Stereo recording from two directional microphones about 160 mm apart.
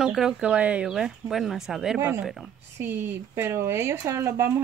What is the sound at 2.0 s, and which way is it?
Speech, 15° right (ahead or behind).